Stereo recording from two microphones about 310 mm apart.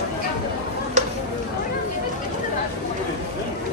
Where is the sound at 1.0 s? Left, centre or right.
Right.